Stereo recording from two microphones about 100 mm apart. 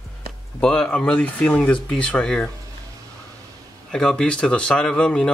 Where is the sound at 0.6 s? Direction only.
10° left (ahead or behind).